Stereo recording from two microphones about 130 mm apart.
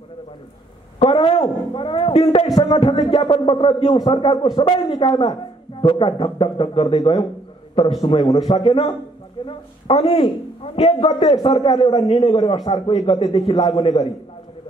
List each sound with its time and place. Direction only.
0.9 s a woman's voice: 45° left (ahead or behind)